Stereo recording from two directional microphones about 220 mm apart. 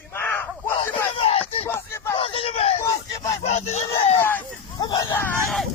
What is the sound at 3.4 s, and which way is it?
Speech, 30° left (ahead or behind).